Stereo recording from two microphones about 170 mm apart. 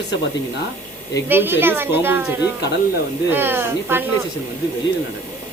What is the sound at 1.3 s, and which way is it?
Speech, 10° right (ahead or behind).